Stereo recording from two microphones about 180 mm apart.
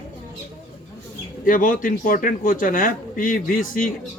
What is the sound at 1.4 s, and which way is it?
A man's voice, 50° left (ahead or behind).